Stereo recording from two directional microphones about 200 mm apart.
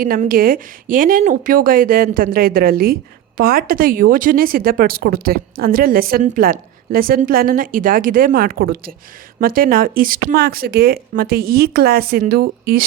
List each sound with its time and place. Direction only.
0.0 s a woman's voice: 45° right (ahead or behind)